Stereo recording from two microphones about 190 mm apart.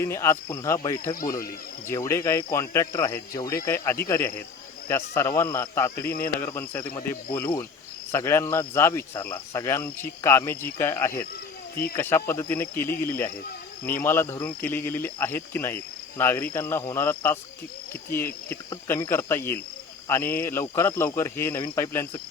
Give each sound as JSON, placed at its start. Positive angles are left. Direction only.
{"t": 0.0, "sound": "speech", "side_deg": 15}
{"t": 18.4, "sound": "speech", "side_deg": 10}